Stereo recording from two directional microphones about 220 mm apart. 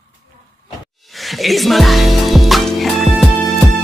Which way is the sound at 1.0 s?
Centre (ahead or behind).